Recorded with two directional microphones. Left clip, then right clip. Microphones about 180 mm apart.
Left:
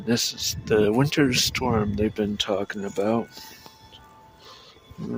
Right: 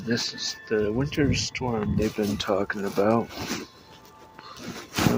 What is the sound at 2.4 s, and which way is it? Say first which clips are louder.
Speech: right 1 dB; 25° left (ahead or behind).